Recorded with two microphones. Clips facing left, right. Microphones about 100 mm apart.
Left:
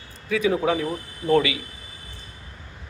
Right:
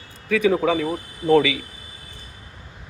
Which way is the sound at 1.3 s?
85° right.